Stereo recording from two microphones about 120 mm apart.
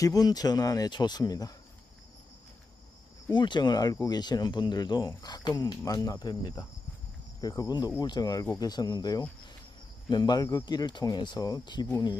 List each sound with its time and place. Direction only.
0.0 s speech: 30° left (ahead or behind)
3.3 s speech: 40° left (ahead or behind)